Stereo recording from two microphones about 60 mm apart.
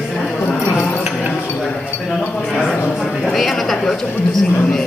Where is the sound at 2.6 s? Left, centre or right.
Left.